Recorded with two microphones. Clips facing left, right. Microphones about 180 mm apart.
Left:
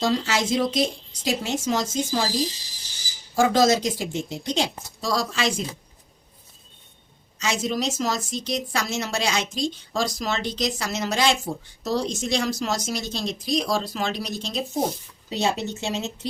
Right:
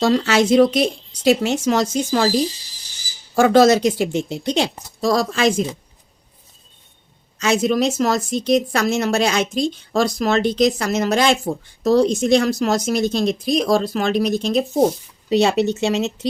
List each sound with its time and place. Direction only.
0.0 s a woman's voice: 70° right (ahead or behind)
4.9 s speech: 55° right (ahead or behind)
7.3 s a woman's voice: 60° right (ahead or behind)
15.3 s speech: 75° right (ahead or behind)